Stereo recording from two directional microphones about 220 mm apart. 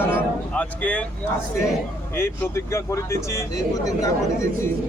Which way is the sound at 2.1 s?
10° left (ahead or behind).